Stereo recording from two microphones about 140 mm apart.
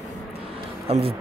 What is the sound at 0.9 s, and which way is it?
Speech, 50° right (ahead or behind).